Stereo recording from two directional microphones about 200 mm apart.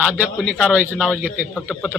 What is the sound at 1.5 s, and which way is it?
Speech, 5° left (ahead or behind).